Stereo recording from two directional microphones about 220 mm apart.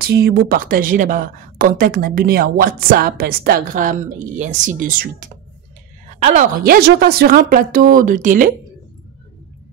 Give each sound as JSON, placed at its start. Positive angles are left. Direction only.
{"t": 0.0, "sound": "a woman's voice", "side_deg": -45}